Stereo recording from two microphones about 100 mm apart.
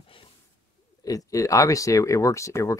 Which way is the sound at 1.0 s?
35° left (ahead or behind).